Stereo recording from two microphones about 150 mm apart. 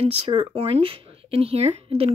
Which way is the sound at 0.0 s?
40° right (ahead or behind).